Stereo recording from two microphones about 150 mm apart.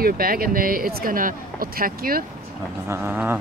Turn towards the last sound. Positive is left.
turn(degrees=-15)  # may be behind; listen again after turning